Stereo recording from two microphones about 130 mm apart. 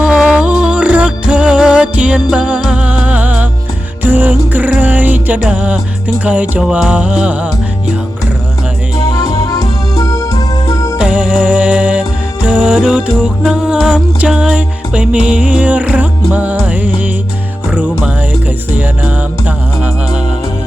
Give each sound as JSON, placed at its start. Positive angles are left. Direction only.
{"t": 0.0, "sound": "music", "side_deg": -5}
{"t": 9.1, "sound": "music", "side_deg": 25}
{"t": 10.9, "sound": "music", "side_deg": -5}